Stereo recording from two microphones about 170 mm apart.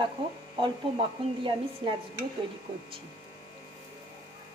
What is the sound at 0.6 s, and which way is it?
A woman's voice, 30° right (ahead or behind).